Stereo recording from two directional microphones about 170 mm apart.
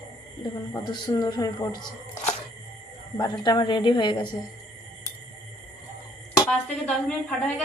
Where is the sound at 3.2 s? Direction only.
25° left (ahead or behind).